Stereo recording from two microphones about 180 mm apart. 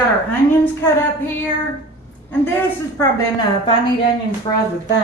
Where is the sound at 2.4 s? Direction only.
10° left (ahead or behind).